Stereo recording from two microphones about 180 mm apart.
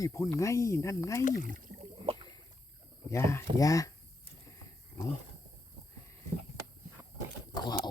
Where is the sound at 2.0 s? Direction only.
30° right (ahead or behind).